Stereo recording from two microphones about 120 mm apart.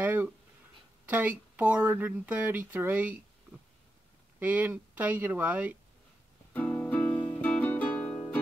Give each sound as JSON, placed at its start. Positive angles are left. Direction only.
{"t": 0.0, "sound": "a sound", "side_deg": -15}
{"t": 1.0, "sound": "speech", "side_deg": -15}
{"t": 4.4, "sound": "speech", "side_deg": -15}
{"t": 6.5, "sound": "music", "side_deg": 15}